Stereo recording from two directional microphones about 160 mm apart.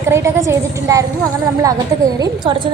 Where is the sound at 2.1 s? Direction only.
25° right (ahead or behind).